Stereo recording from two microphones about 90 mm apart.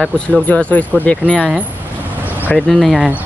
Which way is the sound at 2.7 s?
Centre (ahead or behind).